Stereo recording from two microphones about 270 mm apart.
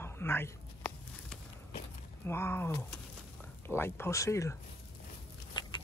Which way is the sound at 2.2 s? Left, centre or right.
Centre.